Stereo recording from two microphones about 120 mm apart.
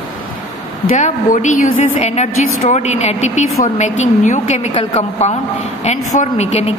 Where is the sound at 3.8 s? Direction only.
85° left.